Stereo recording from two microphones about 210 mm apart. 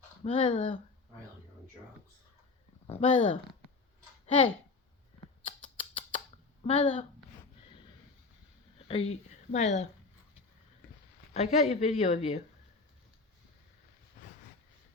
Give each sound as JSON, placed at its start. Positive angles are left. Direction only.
{"t": 0.3, "sound": "speech", "side_deg": 25}
{"t": 3.0, "sound": "speech", "side_deg": 25}
{"t": 5.7, "sound": "squawk", "side_deg": 25}
{"t": 8.9, "sound": "speech", "side_deg": 30}
{"t": 11.3, "sound": "a woman's voice", "side_deg": 30}